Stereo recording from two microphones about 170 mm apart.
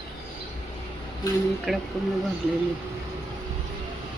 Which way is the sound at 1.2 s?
20° left (ahead or behind).